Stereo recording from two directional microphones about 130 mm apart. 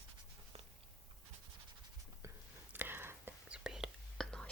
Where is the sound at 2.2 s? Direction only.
20° right (ahead or behind).